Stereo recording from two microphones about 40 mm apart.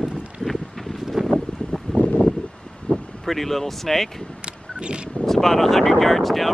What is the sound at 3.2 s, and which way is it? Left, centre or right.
Speech, centre.